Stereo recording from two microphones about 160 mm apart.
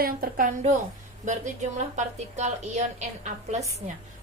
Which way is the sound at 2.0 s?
45° right (ahead or behind).